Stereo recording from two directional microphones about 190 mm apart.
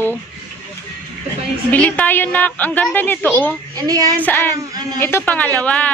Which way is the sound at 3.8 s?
20° right (ahead or behind).